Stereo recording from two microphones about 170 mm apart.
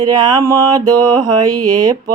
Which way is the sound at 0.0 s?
20° right (ahead or behind).